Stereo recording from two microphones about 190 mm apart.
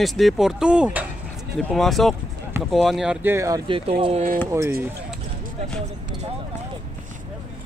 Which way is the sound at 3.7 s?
30° right (ahead or behind).